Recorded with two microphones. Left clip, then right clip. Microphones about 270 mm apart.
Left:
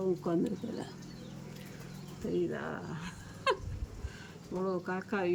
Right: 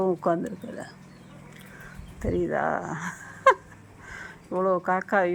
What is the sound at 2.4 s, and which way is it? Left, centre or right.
Speech, centre.